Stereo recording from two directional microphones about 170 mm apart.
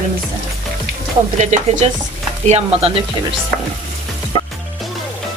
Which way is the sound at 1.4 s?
40° right (ahead or behind).